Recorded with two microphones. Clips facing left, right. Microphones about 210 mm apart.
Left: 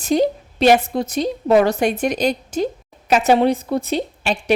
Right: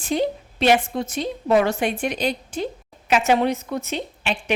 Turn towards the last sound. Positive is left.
turn(degrees=40)  # may be behind; listen again after turning